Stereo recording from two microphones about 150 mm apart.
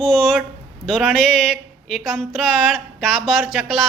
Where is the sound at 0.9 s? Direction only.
5° left (ahead or behind).